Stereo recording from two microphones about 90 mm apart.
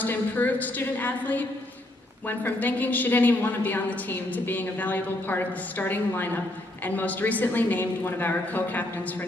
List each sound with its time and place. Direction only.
0.0 s a woman's voice: 20° left (ahead or behind)